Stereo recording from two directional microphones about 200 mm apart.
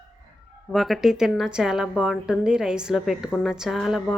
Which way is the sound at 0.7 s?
Centre (ahead or behind).